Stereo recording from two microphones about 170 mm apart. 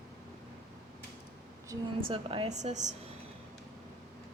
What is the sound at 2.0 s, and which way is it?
Speech, 30° right (ahead or behind).